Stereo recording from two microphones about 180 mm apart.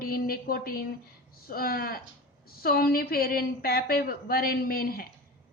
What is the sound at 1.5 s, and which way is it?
Speech, 55° left (ahead or behind).